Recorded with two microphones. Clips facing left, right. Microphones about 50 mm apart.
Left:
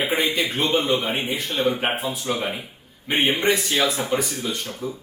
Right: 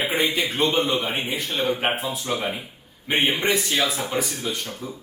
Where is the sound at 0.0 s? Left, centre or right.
Centre.